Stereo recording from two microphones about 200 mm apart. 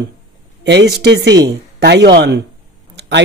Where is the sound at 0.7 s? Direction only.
55° right (ahead or behind).